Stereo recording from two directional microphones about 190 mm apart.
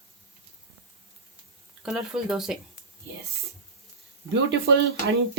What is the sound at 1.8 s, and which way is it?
Speech, 5° right (ahead or behind).